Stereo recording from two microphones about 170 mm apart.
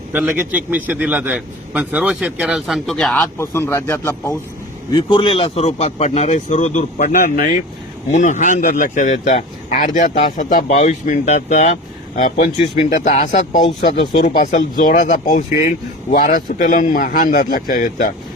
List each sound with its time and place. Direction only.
0.1 s a man's voice: 10° right (ahead or behind)
3.3 s speech: 15° left (ahead or behind)
4.9 s speech: 25° left (ahead or behind); by 13.6 s 45° left (ahead or behind)
13.7 s speech: 30° left (ahead or behind)
14.3 s speech: 50° left (ahead or behind)